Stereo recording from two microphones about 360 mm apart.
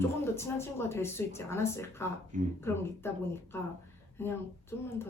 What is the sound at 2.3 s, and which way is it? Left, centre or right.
Speech, right.